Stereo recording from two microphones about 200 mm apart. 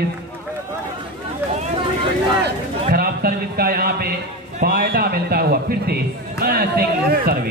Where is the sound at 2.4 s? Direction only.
50° right (ahead or behind).